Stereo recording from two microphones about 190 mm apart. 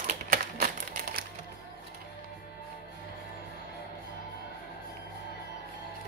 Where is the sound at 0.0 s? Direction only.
45° right (ahead or behind).